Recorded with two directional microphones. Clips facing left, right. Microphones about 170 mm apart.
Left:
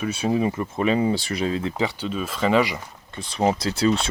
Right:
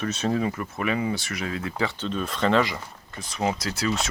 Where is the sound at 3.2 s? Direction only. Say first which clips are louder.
Left 5 dB; 30° left (ahead or behind).